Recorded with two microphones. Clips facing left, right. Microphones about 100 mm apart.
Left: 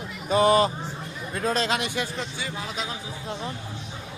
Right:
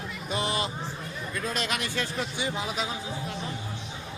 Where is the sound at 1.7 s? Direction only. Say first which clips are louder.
Left 3 dB; 20° left (ahead or behind).